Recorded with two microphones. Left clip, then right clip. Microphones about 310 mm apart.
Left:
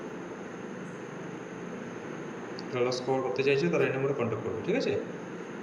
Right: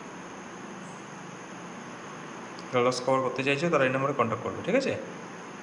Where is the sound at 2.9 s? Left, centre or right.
Right.